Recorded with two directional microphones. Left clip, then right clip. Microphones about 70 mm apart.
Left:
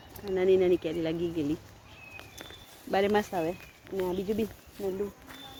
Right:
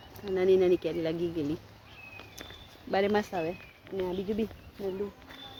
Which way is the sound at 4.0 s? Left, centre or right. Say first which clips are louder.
Left 2 dB; left.